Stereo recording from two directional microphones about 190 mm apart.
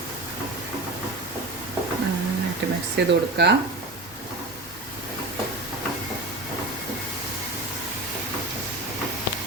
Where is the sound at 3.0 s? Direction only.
65° right (ahead or behind).